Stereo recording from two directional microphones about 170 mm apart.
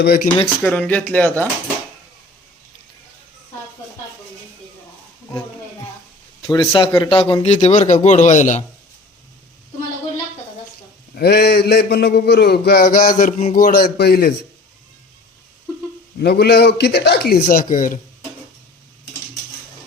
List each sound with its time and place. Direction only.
0.0 s a man's voice: 65° left (ahead or behind)
0.6 s speech: 10° left (ahead or behind)
6.5 s a man's voice: 30° left (ahead or behind); by 8.6 s 45° left (ahead or behind)
11.1 s a man's voice: 70° left (ahead or behind)
16.2 s a man's voice: 75° left (ahead or behind)
17.4 s a man's voice: 50° left (ahead or behind)